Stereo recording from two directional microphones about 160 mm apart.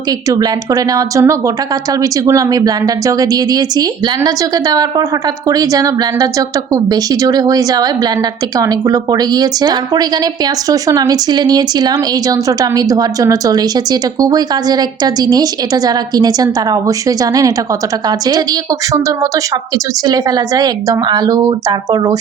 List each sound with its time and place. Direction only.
0.3 s a woman's voice: 20° right (ahead or behind)
18.9 s a woman's voice: 20° right (ahead or behind)